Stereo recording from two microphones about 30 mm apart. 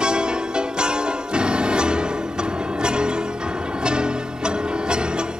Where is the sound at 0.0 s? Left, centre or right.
Right.